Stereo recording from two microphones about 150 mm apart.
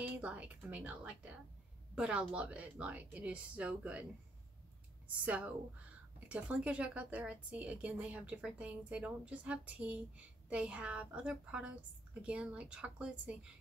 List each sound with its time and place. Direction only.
0.0 s a woman's voice: 10° right (ahead or behind)